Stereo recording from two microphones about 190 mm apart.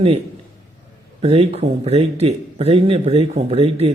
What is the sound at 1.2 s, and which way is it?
A man's voice, 35° right (ahead or behind).